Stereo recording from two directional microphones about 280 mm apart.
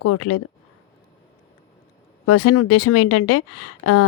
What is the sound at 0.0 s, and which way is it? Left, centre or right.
Speech, left.